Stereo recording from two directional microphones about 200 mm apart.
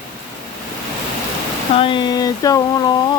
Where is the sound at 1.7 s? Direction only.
25° left (ahead or behind).